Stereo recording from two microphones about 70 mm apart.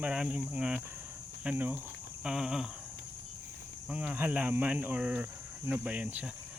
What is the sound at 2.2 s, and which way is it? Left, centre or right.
Speech, centre.